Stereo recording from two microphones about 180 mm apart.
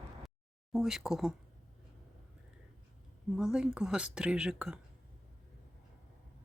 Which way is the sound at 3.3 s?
5° right (ahead or behind).